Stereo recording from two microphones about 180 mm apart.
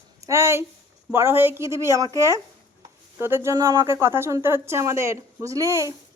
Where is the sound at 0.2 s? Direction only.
15° right (ahead or behind).